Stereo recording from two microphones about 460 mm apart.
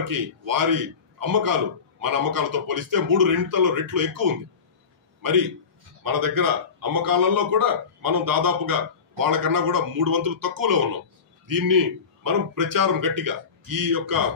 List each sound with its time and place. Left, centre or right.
0.0 s a man's voice: right